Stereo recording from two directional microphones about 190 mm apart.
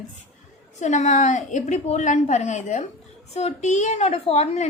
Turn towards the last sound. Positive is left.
turn(degrees=35)  # may be behind; listen again after turning